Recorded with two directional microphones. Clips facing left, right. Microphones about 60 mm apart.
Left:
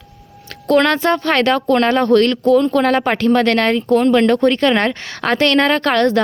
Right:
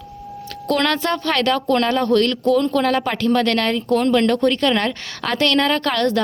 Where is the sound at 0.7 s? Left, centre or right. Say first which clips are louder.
Left 6 dB; left.